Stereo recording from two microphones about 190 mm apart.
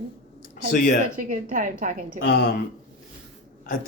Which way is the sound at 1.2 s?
45° right (ahead or behind).